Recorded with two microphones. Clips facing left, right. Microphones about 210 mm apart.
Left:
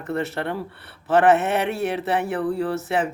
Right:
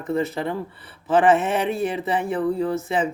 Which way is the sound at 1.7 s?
75° left (ahead or behind).